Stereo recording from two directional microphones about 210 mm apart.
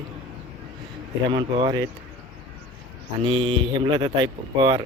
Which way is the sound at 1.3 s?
20° right (ahead or behind).